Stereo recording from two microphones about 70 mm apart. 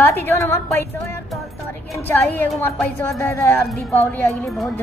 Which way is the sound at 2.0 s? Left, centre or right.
Left.